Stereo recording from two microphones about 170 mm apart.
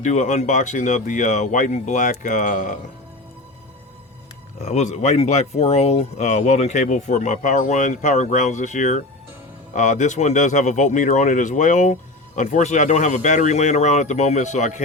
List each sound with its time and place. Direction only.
0.0 s speech: 45° left (ahead or behind)
4.6 s speech: 45° left (ahead or behind)